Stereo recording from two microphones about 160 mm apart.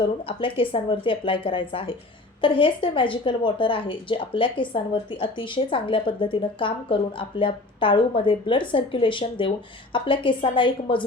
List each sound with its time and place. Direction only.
0.3 s a woman's voice: 35° left (ahead or behind)